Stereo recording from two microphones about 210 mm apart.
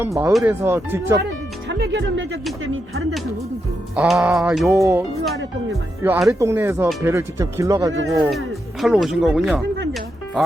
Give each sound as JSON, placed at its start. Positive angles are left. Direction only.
{"t": 0.0, "sound": "speech", "side_deg": -10}
{"t": 1.6, "sound": "speech", "side_deg": -55}
{"t": 3.9, "sound": "speech", "side_deg": -5}
{"t": 4.7, "sound": "speech", "side_deg": -15}
{"t": 8.0, "sound": "speech", "side_deg": 0}